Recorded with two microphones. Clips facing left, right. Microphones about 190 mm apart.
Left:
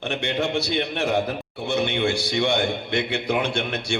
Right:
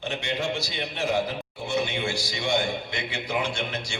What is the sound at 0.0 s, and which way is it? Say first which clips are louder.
A man's voice: left 4 dB; 60° left (ahead or behind).